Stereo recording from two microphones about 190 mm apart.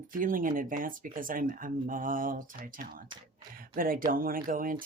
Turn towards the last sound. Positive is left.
turn(degrees=-45)  # may be behind; listen again after turning